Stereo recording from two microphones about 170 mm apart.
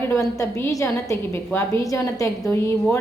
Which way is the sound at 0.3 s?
15° left (ahead or behind).